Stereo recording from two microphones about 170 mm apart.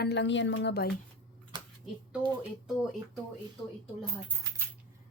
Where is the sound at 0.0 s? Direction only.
85° left.